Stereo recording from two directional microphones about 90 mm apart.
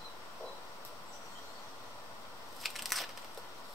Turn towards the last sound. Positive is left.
turn(degrees=0)  # may be behind; listen again after turning